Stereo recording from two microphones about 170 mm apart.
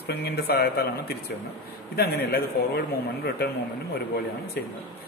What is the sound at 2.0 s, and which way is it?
A man's voice, 65° left (ahead or behind).